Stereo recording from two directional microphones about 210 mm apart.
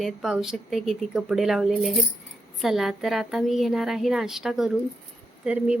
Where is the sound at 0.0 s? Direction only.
Centre (ahead or behind).